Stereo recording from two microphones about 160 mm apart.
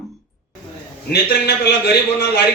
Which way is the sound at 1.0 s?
85° left.